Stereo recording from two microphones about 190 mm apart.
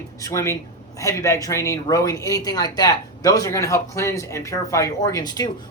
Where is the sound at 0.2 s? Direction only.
15° left (ahead or behind).